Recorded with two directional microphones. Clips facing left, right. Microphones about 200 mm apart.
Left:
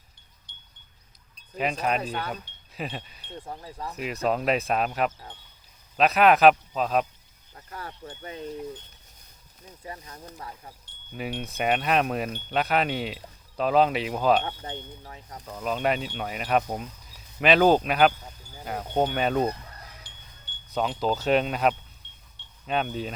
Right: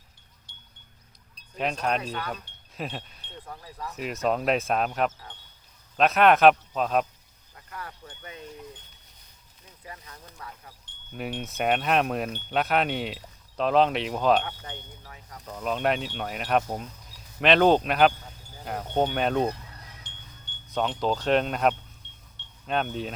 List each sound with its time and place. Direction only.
1.5 s speech: 5° left (ahead or behind)
2.3 s wind chime: 5° left (ahead or behind)
3.4 s speech: 25° left (ahead or behind)
3.9 s speech: centre (ahead or behind)
7.5 s speech: 30° left (ahead or behind)
9.8 s speech: 35° left (ahead or behind)
10.8 s speech: centre (ahead or behind)
14.6 s speech: 30° left (ahead or behind)
15.4 s speech: centre (ahead or behind)
20.7 s speech: 5° left (ahead or behind)